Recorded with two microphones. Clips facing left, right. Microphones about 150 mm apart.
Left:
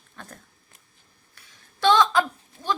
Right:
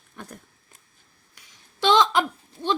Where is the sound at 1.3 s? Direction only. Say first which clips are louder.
Right 2 dB; 20° right (ahead or behind).